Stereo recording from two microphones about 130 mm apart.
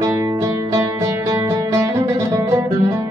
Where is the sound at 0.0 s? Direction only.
25° right (ahead or behind).